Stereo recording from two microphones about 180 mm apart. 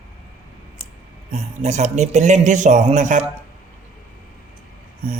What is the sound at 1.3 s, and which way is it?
Speech, 40° right (ahead or behind).